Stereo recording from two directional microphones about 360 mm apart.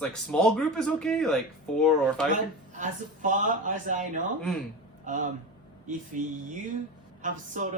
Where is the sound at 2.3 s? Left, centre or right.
Right.